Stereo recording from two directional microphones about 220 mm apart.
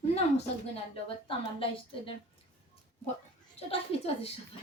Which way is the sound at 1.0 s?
25° left (ahead or behind).